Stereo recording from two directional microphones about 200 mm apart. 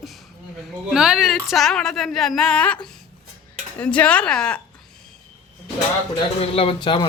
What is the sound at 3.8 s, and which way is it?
Speech, 5° left (ahead or behind).